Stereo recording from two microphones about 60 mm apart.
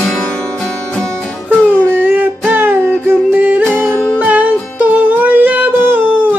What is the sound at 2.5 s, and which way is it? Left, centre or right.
Music, right.